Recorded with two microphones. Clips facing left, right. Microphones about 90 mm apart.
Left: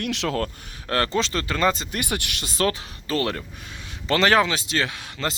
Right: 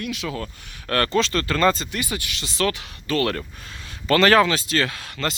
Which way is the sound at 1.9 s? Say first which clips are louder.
Left 1 dB; 60° left (ahead or behind).